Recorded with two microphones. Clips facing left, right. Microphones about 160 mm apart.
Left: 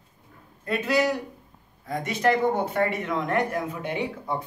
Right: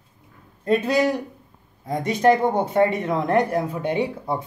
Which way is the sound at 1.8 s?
20° right (ahead or behind).